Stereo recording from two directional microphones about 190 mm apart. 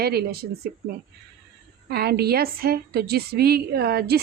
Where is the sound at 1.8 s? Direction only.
60° right (ahead or behind).